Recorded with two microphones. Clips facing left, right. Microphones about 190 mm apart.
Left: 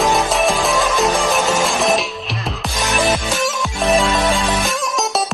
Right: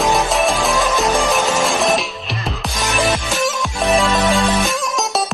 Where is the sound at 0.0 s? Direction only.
Centre (ahead or behind).